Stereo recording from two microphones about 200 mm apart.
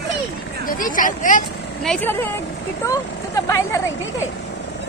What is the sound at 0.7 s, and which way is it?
Speech, 40° left (ahead or behind).